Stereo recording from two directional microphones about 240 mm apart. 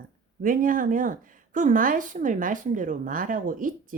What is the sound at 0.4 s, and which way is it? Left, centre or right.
A woman's voice, right.